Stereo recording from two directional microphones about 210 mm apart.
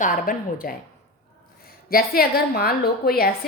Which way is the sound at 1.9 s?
45° left (ahead or behind).